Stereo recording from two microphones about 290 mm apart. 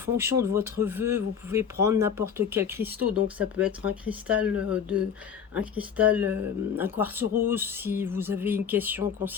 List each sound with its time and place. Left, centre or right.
0.0 s speech: centre